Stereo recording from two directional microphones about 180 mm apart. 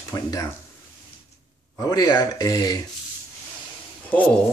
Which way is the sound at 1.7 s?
20° left (ahead or behind).